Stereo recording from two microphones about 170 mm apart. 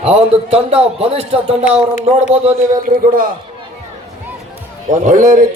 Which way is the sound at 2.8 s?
55° right (ahead or behind).